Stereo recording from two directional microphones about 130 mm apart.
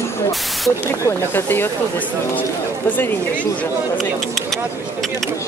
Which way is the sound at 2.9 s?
15° left (ahead or behind).